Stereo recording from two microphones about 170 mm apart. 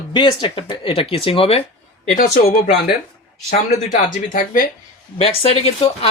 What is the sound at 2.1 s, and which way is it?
Speech, 45° left (ahead or behind).